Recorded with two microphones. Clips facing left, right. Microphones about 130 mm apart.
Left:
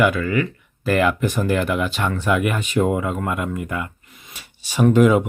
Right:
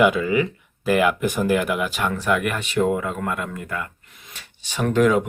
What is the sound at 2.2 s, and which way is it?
Speech, 5° left (ahead or behind).